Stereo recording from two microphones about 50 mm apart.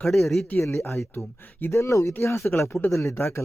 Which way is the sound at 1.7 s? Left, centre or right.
Left.